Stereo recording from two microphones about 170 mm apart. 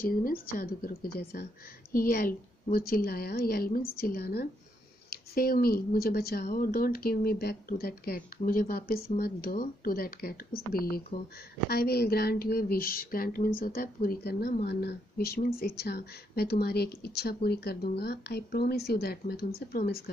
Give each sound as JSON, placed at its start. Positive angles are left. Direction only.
{"t": 0.0, "sound": "speech", "side_deg": 55}
{"t": 6.4, "sound": "speech", "side_deg": 55}
{"t": 19.7, "sound": "speech", "side_deg": 60}